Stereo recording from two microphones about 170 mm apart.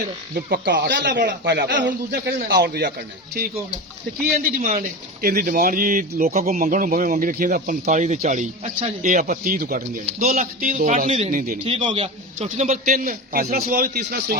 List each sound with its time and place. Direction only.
0.3 s speech: 65° right (ahead or behind)
4.4 s a man's voice: 50° right (ahead or behind)
11.7 s a man's voice: 30° right (ahead or behind)
12.4 s a man's voice: 40° right (ahead or behind)
12.8 s a man's voice: 55° right (ahead or behind)